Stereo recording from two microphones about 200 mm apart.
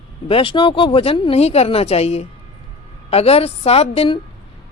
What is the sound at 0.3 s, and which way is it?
A woman's voice, 25° left (ahead or behind).